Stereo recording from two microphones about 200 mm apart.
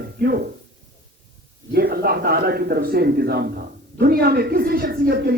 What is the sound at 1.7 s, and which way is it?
Speech, 50° right (ahead or behind).